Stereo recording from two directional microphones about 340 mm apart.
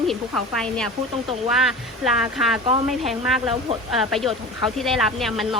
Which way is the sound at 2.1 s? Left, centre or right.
Centre.